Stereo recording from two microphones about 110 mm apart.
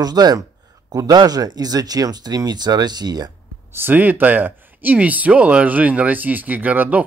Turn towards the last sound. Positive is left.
turn(degrees=-15)  # may be behind; listen again after turning